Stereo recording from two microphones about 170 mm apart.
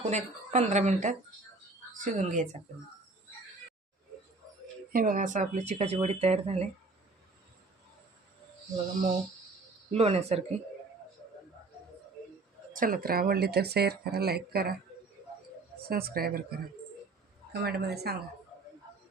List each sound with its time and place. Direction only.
0.1 s speech: 40° right (ahead or behind)
4.9 s speech: 55° right (ahead or behind); by 6.7 s 40° right (ahead or behind)
9.9 s speech: 35° right (ahead or behind)
12.7 s speech: 55° right (ahead or behind)
15.9 s a woman's voice: 65° right (ahead or behind)